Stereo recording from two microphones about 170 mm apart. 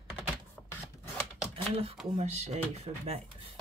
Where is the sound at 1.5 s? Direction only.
35° right (ahead or behind).